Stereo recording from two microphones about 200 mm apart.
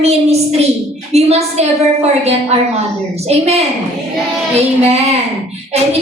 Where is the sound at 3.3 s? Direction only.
30° right (ahead or behind).